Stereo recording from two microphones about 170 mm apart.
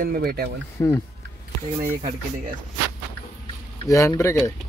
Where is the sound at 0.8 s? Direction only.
20° left (ahead or behind).